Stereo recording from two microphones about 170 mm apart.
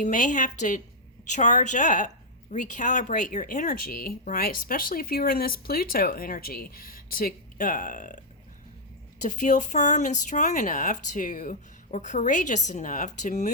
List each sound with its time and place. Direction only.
0.0 s speech: 45° left (ahead or behind)
9.2 s speech: 50° left (ahead or behind)